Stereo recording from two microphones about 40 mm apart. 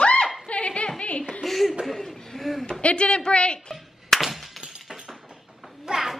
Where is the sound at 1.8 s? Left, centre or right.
Centre.